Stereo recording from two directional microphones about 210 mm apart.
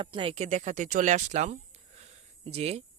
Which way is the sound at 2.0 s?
30° right (ahead or behind).